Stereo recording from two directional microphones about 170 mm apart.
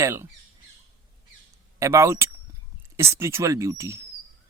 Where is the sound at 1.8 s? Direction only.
15° right (ahead or behind).